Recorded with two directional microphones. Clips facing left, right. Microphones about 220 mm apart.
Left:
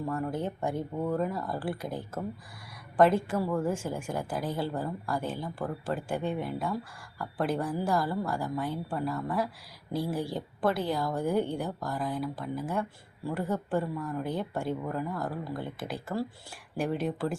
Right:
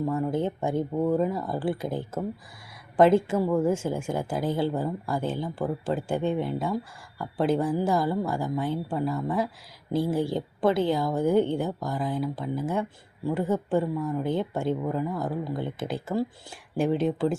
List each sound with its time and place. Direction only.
0.3 s speech: 25° right (ahead or behind)